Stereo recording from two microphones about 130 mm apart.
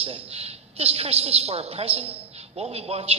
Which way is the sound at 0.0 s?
50° right (ahead or behind).